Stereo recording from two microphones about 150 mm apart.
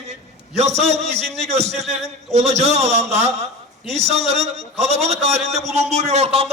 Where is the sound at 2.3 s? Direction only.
45° right (ahead or behind).